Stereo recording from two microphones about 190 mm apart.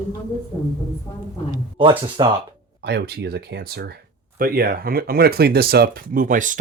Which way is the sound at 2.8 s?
60° right (ahead or behind).